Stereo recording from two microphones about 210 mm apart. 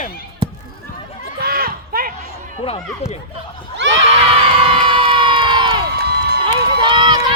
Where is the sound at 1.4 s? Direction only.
45° right (ahead or behind).